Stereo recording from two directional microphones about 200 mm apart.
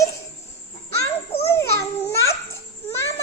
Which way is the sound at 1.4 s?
10° left (ahead or behind).